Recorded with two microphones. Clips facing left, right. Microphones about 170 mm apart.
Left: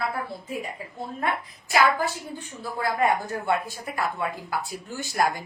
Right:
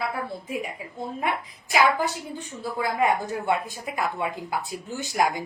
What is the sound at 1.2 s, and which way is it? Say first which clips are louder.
A woman's voice: left 1 dB; 15° right (ahead or behind).